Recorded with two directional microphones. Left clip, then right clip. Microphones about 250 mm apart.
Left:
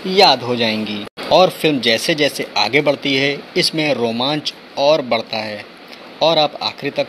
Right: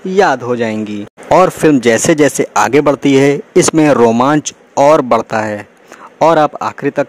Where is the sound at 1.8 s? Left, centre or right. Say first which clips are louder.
Right 6 dB; right.